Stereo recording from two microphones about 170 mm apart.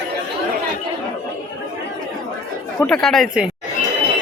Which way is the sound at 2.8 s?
5° left (ahead or behind).